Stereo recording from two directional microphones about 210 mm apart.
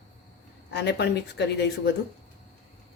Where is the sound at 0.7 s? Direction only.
55° left (ahead or behind).